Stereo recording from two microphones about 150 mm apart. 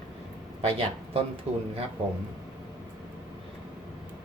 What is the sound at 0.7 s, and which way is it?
Speech, 40° right (ahead or behind).